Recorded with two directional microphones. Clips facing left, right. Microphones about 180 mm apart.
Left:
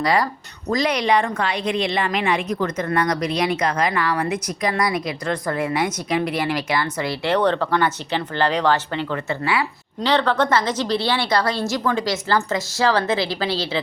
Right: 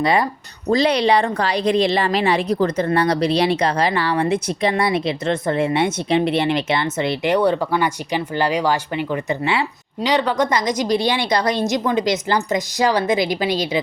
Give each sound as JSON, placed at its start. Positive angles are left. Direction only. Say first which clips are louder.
{"t": 0.0, "sound": "a woman's voice", "louder": "right 2 dB", "side_deg": -25}
{"t": 7.3, "sound": "a woman's voice", "louder": "even", "side_deg": -10}